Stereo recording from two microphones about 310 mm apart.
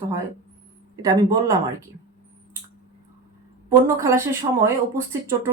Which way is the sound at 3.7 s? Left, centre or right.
Centre.